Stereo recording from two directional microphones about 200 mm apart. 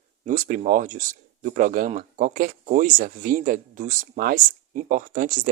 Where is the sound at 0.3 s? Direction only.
40° right (ahead or behind).